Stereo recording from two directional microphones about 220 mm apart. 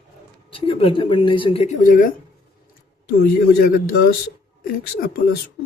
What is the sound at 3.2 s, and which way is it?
Speech, 45° left (ahead or behind).